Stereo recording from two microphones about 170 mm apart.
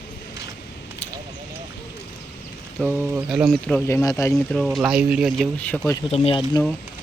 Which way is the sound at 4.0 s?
20° left (ahead or behind).